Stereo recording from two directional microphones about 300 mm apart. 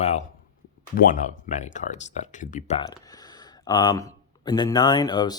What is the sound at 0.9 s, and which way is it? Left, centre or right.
Speech, left.